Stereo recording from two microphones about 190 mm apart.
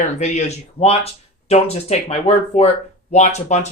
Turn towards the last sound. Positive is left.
turn(degrees=35)  # may be behind; listen again after turning